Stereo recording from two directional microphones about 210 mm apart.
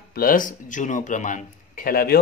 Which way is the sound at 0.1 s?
45° left (ahead or behind).